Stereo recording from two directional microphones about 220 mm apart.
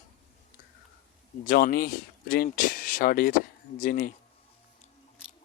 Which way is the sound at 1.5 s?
40° left (ahead or behind).